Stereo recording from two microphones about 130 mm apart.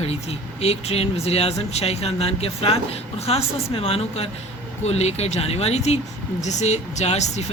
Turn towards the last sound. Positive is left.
turn(degrees=60)  # may be behind; listen again after turning